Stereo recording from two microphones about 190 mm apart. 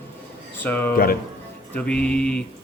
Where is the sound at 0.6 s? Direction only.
10° left (ahead or behind).